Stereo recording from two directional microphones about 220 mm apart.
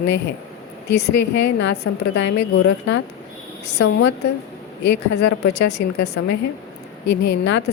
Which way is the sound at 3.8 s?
50° left (ahead or behind).